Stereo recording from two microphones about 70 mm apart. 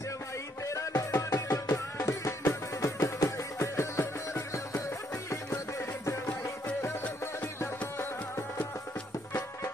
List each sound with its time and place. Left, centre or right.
0.7 s music: left
5.3 s music: left